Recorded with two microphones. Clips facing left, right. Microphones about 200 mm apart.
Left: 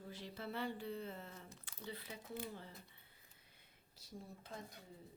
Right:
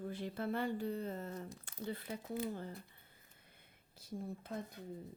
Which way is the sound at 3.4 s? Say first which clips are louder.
Right 4 dB; 55° right (ahead or behind).